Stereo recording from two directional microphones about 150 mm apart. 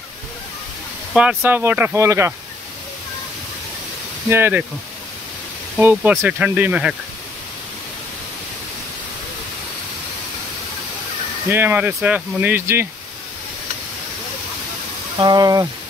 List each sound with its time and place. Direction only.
1.1 s speech: 10° right (ahead or behind)
4.3 s speech: 15° right (ahead or behind)
5.8 s speech: 10° right (ahead or behind)
11.5 s speech: 15° right (ahead or behind)
15.1 s speech: 25° right (ahead or behind)